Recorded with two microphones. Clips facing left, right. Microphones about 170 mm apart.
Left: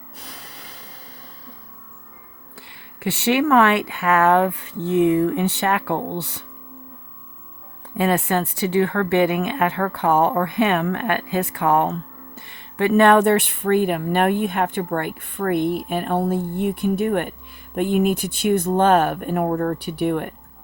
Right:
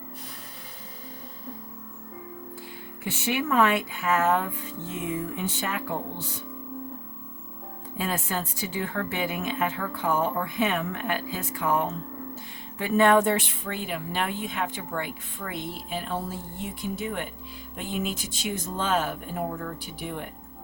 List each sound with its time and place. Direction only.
3.0 s speech: 75° left (ahead or behind)
7.9 s speech: 65° left (ahead or behind)